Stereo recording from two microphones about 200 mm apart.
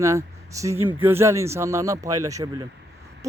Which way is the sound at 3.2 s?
15° right (ahead or behind).